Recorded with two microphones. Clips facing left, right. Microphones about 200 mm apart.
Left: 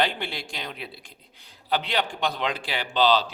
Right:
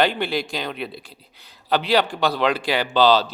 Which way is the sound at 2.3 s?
85° right.